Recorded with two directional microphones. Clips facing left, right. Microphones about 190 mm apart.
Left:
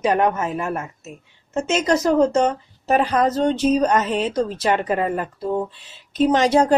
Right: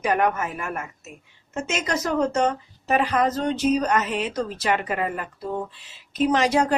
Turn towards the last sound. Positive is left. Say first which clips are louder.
# left 4 dB
turn(degrees=30)  # may be behind; listen again after turning